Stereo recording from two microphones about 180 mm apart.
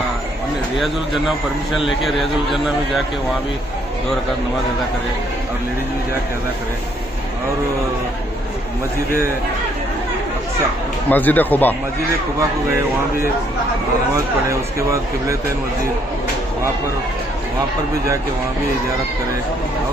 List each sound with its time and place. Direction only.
1.9 s a man's voice: centre (ahead or behind)
11.1 s speech: 10° left (ahead or behind)
14.1 s speech: 15° right (ahead or behind)